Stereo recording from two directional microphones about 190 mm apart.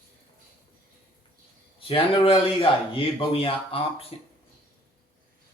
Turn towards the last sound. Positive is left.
turn(degrees=30)  # may be behind; listen again after turning